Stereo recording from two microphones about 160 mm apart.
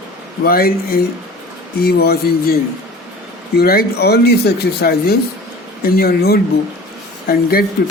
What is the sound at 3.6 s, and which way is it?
Speech, 80° left.